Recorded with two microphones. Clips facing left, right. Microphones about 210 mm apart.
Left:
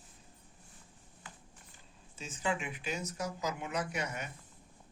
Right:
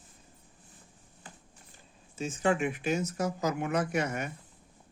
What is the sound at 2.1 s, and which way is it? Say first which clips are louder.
Speech: right 8 dB; 50° right (ahead or behind).